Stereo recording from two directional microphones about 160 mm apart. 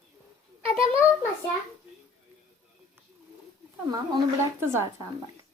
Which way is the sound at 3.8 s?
25° right (ahead or behind).